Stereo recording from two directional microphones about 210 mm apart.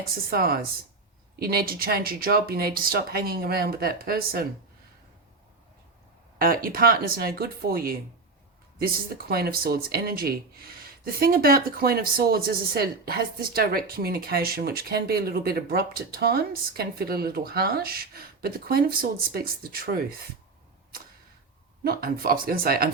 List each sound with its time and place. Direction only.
0.1 s speech: 45° right (ahead or behind)
6.4 s speech: 45° right (ahead or behind)
21.8 s speech: 45° right (ahead or behind)